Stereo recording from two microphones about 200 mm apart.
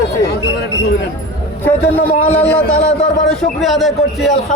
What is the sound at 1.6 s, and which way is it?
A man's voice, 10° left (ahead or behind).